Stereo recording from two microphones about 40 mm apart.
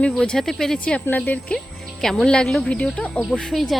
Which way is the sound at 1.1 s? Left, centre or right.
Left.